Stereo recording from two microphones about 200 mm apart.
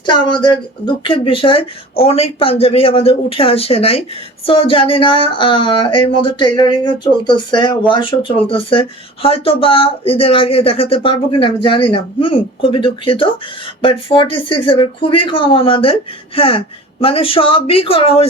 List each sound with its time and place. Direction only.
0.0 s speech: 25° left (ahead or behind)